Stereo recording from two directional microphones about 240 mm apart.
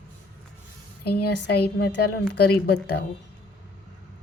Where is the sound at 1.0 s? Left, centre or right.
Left.